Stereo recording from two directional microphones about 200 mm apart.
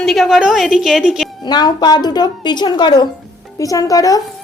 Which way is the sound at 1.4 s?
20° left (ahead or behind).